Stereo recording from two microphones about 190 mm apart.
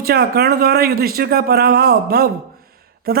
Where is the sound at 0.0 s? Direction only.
55° right (ahead or behind).